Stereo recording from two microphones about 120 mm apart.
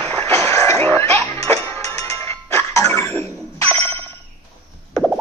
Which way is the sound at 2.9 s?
20° left (ahead or behind).